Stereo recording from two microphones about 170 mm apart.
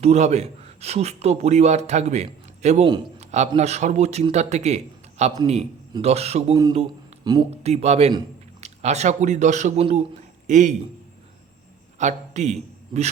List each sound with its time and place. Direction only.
0.0 s a man's voice: 40° right (ahead or behind)
2.8 s a man's voice: 30° right (ahead or behind)
3.5 s a man's voice: 40° right (ahead or behind)
6.5 s speech: 25° right (ahead or behind)
7.6 s a man's voice: 40° right (ahead or behind)
11.9 s a man's voice: 45° right (ahead or behind)